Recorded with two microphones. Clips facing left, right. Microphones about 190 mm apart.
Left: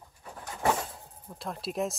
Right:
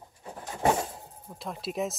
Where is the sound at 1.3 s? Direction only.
Centre (ahead or behind).